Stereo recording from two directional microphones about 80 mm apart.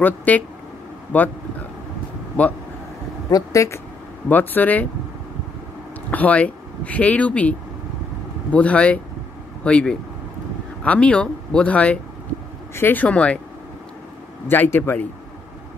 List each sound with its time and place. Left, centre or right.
0.0 s speech: centre
3.3 s speech: left
4.3 s speech: left
6.0 s speech: centre
14.5 s speech: left